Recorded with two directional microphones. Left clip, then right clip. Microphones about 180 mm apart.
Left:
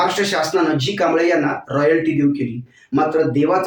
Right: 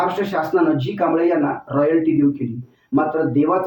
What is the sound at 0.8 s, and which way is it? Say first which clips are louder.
Speech: left 2 dB; 5° left (ahead or behind).